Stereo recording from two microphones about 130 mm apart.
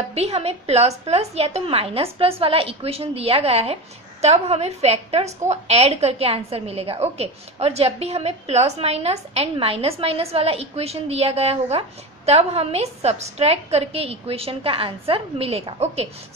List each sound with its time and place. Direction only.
0.1 s a woman's voice: 55° right (ahead or behind)